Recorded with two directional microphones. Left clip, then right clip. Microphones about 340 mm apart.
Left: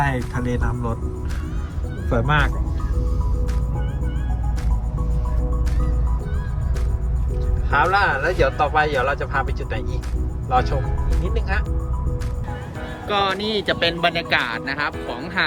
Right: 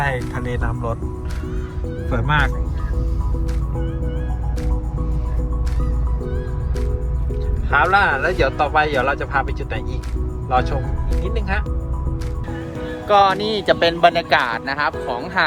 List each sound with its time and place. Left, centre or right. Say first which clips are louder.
0.0 s music: right 1 dB; centre
2.1 s speech: right 1 dB; right
7.7 s speech: right 2 dB; centre
13.1 s speech: right 6 dB; centre